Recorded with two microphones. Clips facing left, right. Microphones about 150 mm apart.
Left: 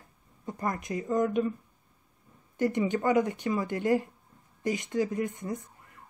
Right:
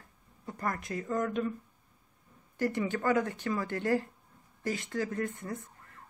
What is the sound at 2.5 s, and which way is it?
Speech, 20° left (ahead or behind).